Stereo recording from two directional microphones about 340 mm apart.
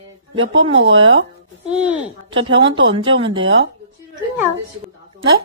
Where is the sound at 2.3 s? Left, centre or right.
Centre.